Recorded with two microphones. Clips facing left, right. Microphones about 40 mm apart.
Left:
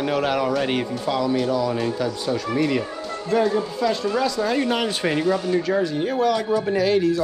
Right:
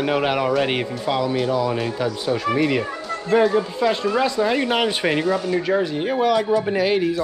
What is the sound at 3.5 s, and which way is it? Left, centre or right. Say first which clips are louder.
A man's voice: right 2 dB; right.